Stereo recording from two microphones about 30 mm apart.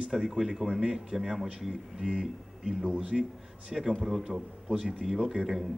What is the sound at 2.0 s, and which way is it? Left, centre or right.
Speech, right.